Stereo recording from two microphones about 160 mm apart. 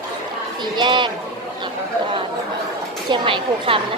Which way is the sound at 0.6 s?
30° right (ahead or behind).